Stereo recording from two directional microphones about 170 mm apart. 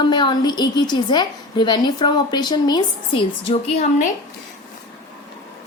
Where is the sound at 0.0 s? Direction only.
25° left (ahead or behind).